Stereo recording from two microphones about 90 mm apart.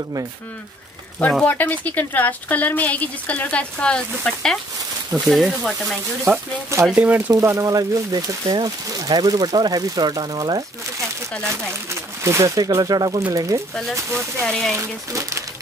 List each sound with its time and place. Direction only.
1.4 s speech: 20° left (ahead or behind); by 5.9 s centre (ahead or behind)
6.3 s speech: 25° right (ahead or behind)
7.3 s speech: 35° right (ahead or behind); by 10.6 s 50° right (ahead or behind)
11.9 s speech: 30° right (ahead or behind)
14.4 s speech: 10° left (ahead or behind)
14.8 s speech: 35° right (ahead or behind)